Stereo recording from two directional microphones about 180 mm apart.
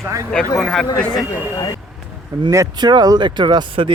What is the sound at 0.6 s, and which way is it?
Speech, centre (ahead or behind).